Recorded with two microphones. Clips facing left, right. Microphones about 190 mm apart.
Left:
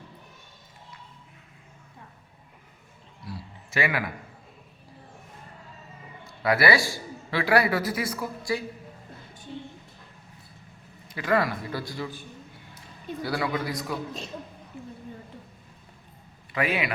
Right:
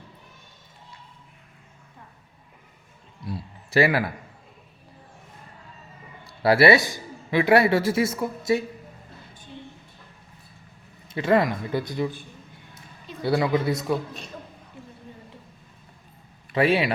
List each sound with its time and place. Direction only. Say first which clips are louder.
3.7 s a man's voice: right 7 dB; 35° right (ahead or behind)
6.2 s a man's voice: right 6 dB; 35° right (ahead or behind)
11.1 s speech: right 4 dB; 25° right (ahead or behind)
13.2 s speech: right 7 dB; 25° right (ahead or behind)
16.6 s speech: right 6 dB; 30° right (ahead or behind)